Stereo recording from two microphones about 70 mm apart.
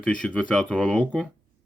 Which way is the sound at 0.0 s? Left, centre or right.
Centre.